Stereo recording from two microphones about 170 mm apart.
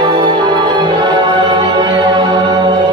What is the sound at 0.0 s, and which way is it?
Music, 25° right (ahead or behind).